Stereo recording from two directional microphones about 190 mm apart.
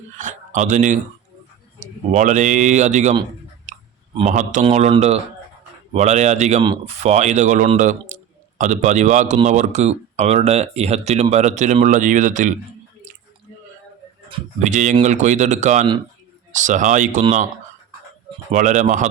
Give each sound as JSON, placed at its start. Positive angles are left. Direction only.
{"t": 0.2, "sound": "a man's voice", "side_deg": -40}
{"t": 3.7, "sound": "clicking", "side_deg": -40}
{"t": 4.2, "sound": "a man's voice", "side_deg": -40}
{"t": 14.3, "sound": "a man's voice", "side_deg": -35}
{"t": 18.5, "sound": "a man's voice", "side_deg": -40}